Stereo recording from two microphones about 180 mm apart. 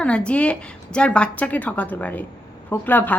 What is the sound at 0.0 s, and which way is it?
A woman's voice, 5° left (ahead or behind).